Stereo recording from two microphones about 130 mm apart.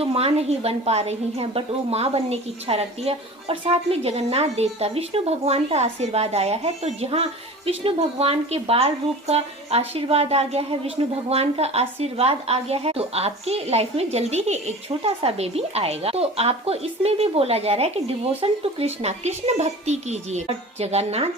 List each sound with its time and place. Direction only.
0.0 s a woman's voice: 45° right (ahead or behind)